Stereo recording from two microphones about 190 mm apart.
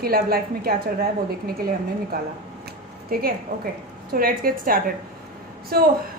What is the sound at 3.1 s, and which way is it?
A woman's voice, 50° right (ahead or behind).